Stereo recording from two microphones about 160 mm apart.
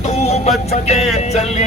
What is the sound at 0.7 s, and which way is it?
Speech, 40° left (ahead or behind).